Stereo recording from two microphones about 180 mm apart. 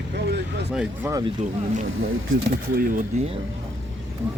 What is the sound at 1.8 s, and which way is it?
Speech, 90° right.